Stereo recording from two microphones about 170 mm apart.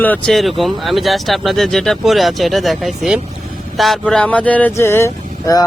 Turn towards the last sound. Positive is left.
turn(degrees=20)  # may be behind; listen again after turning